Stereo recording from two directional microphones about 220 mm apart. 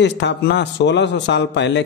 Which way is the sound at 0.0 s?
50° left (ahead or behind).